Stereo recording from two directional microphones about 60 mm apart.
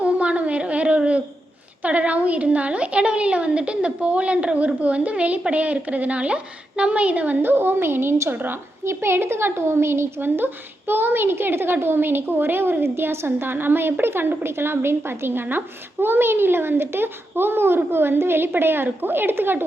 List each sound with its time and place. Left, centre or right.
0.0 s a sound: right
1.8 s a woman's voice: right
7.4 s a woman's voice: right
8.8 s a woman's voice: right